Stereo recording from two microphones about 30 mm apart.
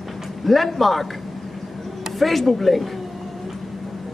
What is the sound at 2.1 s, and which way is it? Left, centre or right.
Speech, centre.